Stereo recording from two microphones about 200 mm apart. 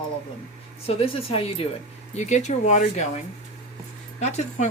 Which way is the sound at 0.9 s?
30° left (ahead or behind).